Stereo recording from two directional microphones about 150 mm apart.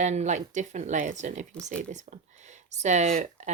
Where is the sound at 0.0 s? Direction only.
50° right (ahead or behind).